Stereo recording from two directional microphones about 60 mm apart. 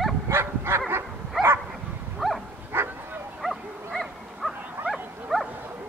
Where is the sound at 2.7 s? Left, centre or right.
Right.